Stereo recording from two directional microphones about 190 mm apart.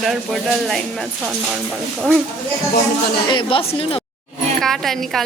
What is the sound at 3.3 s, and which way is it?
Speech, 25° left (ahead or behind).